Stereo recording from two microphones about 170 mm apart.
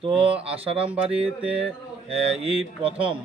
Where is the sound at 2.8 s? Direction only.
35° right (ahead or behind).